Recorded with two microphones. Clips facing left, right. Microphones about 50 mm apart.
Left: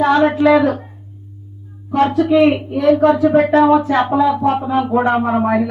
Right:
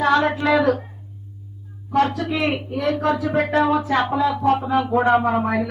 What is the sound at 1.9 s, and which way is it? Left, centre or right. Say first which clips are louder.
Speech: left 6 dB; centre.